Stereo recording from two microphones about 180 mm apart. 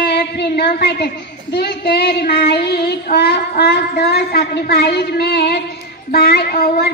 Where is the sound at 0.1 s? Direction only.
70° left (ahead or behind).